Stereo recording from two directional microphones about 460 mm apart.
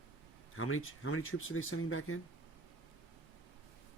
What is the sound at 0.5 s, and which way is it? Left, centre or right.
Speech, left.